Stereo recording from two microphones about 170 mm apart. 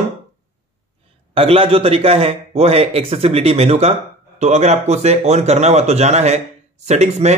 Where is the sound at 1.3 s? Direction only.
35° right (ahead or behind).